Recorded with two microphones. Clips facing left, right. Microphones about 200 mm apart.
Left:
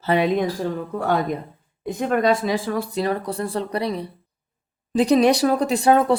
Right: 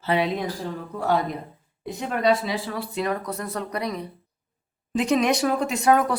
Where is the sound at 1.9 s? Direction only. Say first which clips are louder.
Left 3 dB; 50° left (ahead or behind).